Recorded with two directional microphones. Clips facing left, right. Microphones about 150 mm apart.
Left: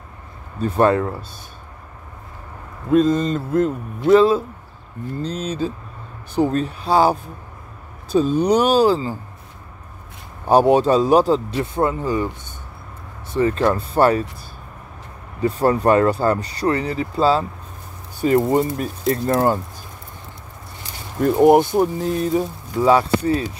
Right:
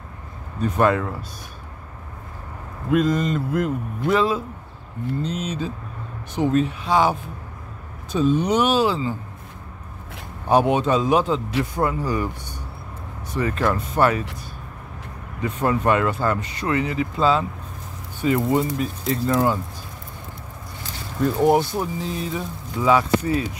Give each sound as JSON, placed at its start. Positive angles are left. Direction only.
{"t": 0.6, "sound": "speech", "side_deg": 30}
{"t": 2.9, "sound": "speech", "side_deg": 30}
{"t": 10.5, "sound": "speech", "side_deg": 35}
{"t": 13.3, "sound": "speech", "side_deg": 30}
{"t": 15.4, "sound": "speech", "side_deg": 35}
{"t": 18.5, "sound": "speech", "side_deg": 45}
{"t": 21.5, "sound": "speech", "side_deg": 50}
{"t": 22.8, "sound": "speech", "side_deg": 30}